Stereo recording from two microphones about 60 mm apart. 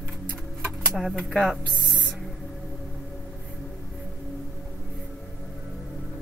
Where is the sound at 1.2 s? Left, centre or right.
Centre.